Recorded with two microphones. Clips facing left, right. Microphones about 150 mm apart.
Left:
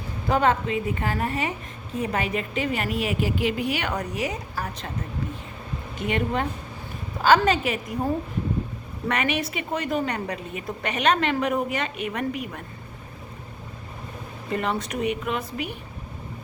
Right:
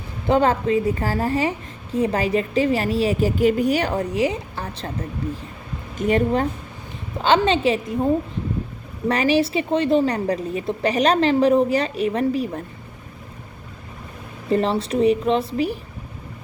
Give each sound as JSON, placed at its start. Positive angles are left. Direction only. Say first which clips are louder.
{"t": 0.3, "sound": "a woman's voice", "louder": "right 4 dB", "side_deg": -30}
{"t": 3.9, "sound": "a woman's voice", "louder": "right 7 dB", "side_deg": -30}
{"t": 6.0, "sound": "a woman's voice", "louder": "right 7 dB", "side_deg": -35}
{"t": 7.2, "sound": "a woman's voice", "louder": "right 1 dB", "side_deg": -25}
{"t": 9.0, "sound": "a woman's voice", "louder": "right 7 dB", "side_deg": -30}
{"t": 14.5, "sound": "a woman's voice", "louder": "right 7 dB", "side_deg": -30}